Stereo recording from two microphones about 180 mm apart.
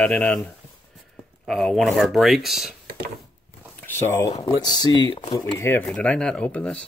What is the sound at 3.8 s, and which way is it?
Speech, 15° left (ahead or behind).